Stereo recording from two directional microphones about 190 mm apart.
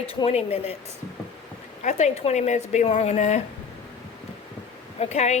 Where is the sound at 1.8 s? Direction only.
40° left (ahead or behind).